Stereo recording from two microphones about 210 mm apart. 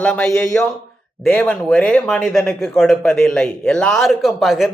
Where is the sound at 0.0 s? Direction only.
5° left (ahead or behind).